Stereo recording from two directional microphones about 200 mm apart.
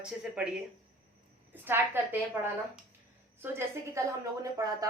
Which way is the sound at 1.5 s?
10° right (ahead or behind).